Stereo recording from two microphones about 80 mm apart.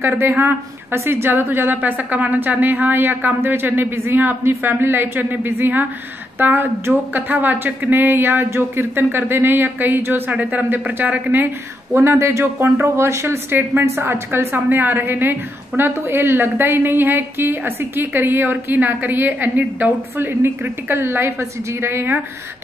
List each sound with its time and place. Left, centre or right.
0.0 s speech: right